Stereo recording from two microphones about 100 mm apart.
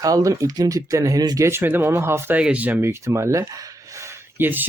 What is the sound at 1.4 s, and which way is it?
Speech, 25° right (ahead or behind).